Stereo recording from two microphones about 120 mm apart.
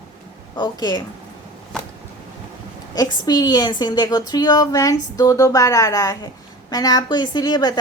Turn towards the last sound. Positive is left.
turn(degrees=35)  # may be behind; listen again after turning